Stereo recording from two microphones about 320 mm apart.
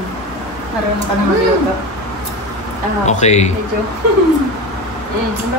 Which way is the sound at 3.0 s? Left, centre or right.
Left.